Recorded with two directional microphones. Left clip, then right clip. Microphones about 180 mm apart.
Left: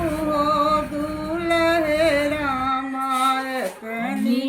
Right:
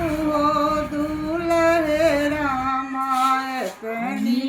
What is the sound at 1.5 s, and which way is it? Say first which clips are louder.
Singing: right 1 dB; 10° left (ahead or behind).